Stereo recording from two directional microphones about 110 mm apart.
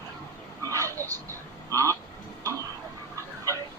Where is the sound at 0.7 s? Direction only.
30° right (ahead or behind).